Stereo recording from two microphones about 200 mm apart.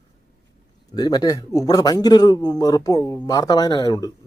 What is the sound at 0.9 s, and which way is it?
Speech, 20° left (ahead or behind).